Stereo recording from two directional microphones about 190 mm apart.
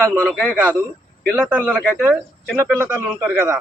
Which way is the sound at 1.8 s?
5° left (ahead or behind).